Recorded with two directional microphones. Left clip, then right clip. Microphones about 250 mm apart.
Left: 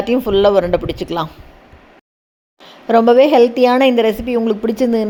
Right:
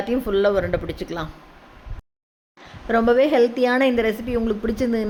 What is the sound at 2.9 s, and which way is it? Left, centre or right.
A woman's voice, centre.